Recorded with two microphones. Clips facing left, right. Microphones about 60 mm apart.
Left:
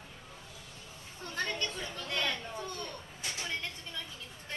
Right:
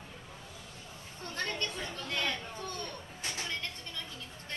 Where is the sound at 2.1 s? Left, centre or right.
Centre.